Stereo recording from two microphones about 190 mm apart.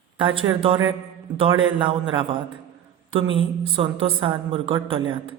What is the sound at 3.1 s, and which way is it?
Speech, 30° right (ahead or behind).